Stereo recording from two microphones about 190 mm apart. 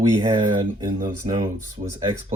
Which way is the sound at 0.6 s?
45° right (ahead or behind).